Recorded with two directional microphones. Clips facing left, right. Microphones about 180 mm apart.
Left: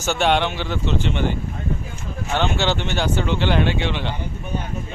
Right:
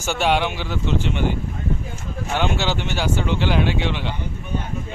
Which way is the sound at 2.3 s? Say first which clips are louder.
Left 1 dB; 10° right (ahead or behind).